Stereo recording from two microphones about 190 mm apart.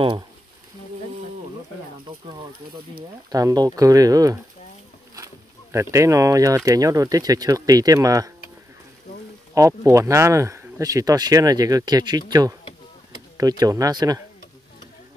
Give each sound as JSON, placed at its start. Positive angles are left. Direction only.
{"t": 3.3, "sound": "speech", "side_deg": -20}
{"t": 9.5, "sound": "speech", "side_deg": -15}